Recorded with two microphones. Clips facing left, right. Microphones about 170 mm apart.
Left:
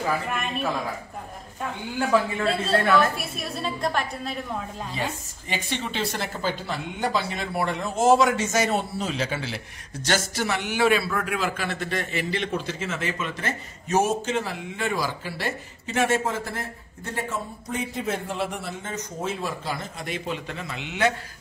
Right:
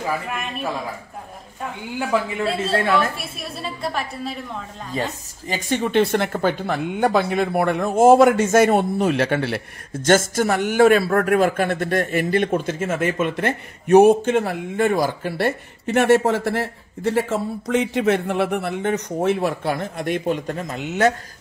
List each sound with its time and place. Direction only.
0.3 s a woman's voice: centre (ahead or behind)
2.4 s a woman's voice: centre (ahead or behind)
4.9 s speech: 40° right (ahead or behind)